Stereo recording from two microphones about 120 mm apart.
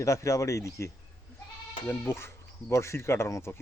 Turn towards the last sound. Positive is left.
turn(degrees=25)  # may be behind; listen again after turning